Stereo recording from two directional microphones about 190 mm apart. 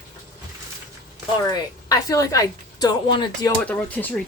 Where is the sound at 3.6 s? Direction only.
5° left (ahead or behind).